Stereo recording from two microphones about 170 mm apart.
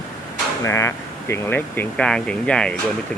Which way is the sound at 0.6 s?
15° left (ahead or behind).